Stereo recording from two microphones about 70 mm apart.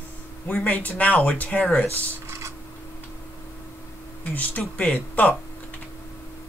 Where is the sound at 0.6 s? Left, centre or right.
Centre.